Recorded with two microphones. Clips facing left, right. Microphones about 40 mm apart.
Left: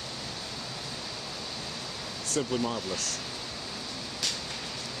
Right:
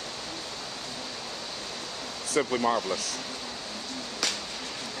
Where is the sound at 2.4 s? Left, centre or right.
Right.